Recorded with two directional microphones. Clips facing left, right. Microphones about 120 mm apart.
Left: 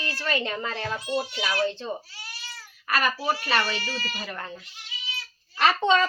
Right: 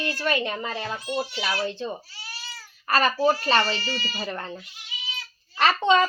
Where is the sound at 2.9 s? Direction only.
30° right (ahead or behind).